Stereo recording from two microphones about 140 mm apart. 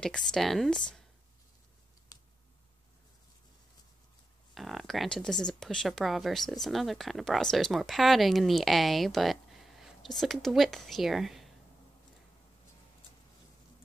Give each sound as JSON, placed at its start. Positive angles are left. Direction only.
{"t": 0.0, "sound": "speech", "side_deg": 5}
{"t": 2.1, "sound": "a sound", "side_deg": 25}
{"t": 4.6, "sound": "speech", "side_deg": 0}